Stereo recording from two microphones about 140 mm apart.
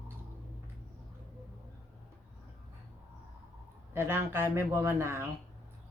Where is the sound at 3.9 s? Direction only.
15° right (ahead or behind).